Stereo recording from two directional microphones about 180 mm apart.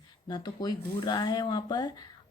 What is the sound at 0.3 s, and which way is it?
Speech, 25° left (ahead or behind).